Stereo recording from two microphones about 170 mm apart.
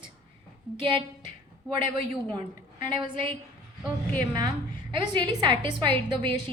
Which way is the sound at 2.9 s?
30° right (ahead or behind).